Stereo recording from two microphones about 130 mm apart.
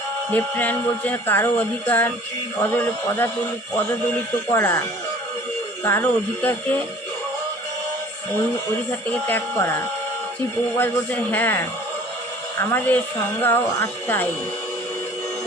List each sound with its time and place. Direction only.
0.3 s music: 15° left (ahead or behind)
4.4 s speech: 20° left (ahead or behind)
5.8 s music: 20° left (ahead or behind)
9.0 s music: 15° left (ahead or behind)
12.7 s music: 15° left (ahead or behind)